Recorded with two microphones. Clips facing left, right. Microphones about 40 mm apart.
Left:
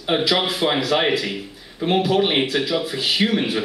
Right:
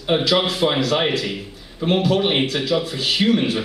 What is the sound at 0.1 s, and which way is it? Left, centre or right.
A man's voice, centre.